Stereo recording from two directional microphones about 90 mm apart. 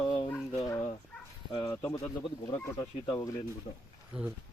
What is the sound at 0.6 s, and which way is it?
Fowl, 35° left (ahead or behind).